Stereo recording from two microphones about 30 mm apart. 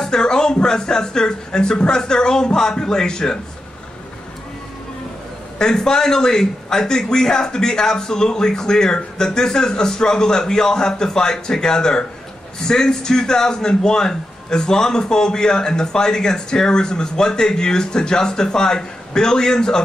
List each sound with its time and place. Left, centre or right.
0.0 s a man's voice: left
5.6 s a man's voice: left